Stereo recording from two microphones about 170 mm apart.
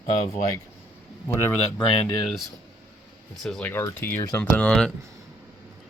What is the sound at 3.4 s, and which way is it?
Speech, 5° left (ahead or behind).